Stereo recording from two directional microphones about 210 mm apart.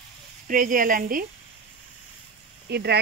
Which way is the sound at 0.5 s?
40° right (ahead or behind).